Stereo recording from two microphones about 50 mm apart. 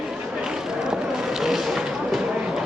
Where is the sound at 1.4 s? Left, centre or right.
Centre.